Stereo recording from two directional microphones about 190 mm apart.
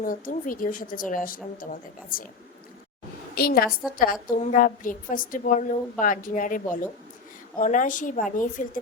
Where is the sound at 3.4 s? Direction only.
55° left (ahead or behind).